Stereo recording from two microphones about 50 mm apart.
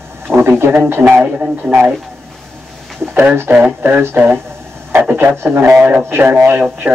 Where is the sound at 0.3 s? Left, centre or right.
Right.